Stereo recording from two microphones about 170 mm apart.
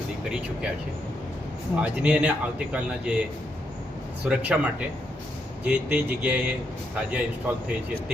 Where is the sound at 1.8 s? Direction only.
5° right (ahead or behind).